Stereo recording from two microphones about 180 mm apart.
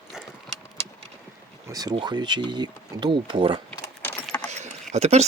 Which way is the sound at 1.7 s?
20° right (ahead or behind).